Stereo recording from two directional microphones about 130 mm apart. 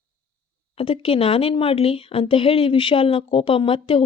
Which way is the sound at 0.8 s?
45° left (ahead or behind).